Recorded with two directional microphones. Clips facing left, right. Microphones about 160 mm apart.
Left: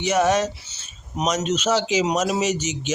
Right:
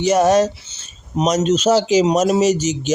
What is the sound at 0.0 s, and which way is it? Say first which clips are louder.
Speech: right 6 dB; 40° right (ahead or behind).